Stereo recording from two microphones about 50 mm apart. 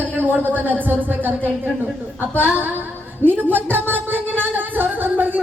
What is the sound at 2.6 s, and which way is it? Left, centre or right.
Speech, right.